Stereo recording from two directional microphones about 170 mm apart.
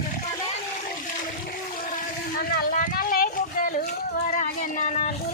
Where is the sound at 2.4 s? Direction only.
55° left (ahead or behind).